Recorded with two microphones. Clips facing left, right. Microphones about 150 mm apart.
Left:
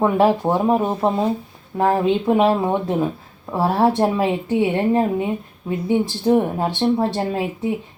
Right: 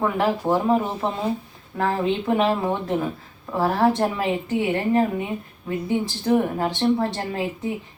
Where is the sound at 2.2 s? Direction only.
15° left (ahead or behind).